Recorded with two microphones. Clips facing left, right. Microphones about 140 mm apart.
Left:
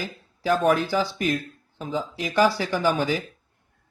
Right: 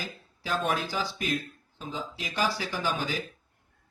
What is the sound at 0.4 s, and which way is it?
Speech, 60° left (ahead or behind).